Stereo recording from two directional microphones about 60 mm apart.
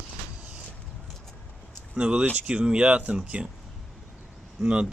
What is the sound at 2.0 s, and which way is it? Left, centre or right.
Speech, centre.